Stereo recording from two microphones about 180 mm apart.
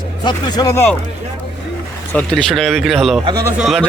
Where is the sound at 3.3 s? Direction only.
20° right (ahead or behind).